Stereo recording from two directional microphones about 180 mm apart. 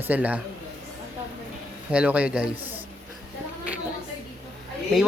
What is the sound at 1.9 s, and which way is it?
Speech, 5° right (ahead or behind).